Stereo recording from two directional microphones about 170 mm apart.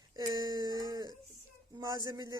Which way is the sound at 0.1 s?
25° right (ahead or behind).